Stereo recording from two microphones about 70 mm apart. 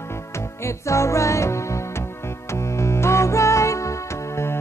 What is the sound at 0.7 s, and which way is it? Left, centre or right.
Music, left.